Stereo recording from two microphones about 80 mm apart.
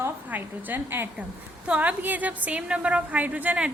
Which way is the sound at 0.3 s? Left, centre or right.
Right.